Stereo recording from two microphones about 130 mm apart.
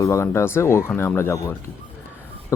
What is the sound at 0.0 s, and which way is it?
Speech, 20° left (ahead or behind).